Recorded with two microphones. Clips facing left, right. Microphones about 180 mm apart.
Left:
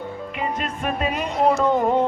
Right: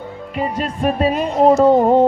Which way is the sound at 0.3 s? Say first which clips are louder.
Right 7 dB; 35° right (ahead or behind).